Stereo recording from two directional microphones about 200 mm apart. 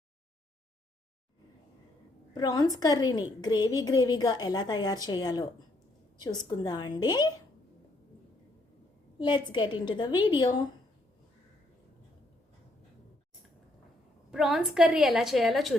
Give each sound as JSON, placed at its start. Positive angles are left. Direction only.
{"t": 2.3, "sound": "a woman's voice", "side_deg": 20}
{"t": 9.1, "sound": "a woman's voice", "side_deg": 25}
{"t": 14.3, "sound": "a woman's voice", "side_deg": 0}